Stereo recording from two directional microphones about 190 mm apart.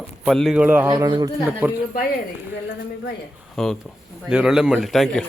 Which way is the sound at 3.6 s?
Centre (ahead or behind).